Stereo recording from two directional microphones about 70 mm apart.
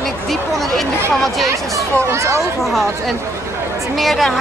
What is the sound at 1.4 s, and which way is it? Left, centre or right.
Speech, right.